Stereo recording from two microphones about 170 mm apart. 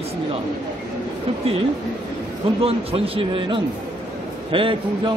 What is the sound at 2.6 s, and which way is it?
Speech, 35° right (ahead or behind).